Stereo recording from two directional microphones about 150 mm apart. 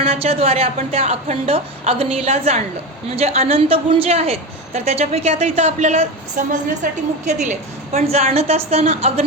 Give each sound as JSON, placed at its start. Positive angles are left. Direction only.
{"t": 0.0, "sound": "a woman's voice", "side_deg": -40}
{"t": 7.9, "sound": "a woman's voice", "side_deg": -45}